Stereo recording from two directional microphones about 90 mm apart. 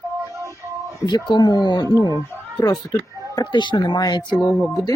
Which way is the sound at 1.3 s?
50° left (ahead or behind).